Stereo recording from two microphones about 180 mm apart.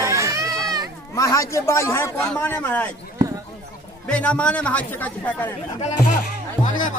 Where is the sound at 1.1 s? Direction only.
15° left (ahead or behind).